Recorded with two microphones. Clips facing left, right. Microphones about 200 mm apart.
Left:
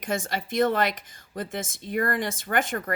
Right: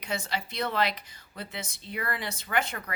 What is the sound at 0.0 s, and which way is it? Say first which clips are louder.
Speech: left 4 dB; 50° left (ahead or behind).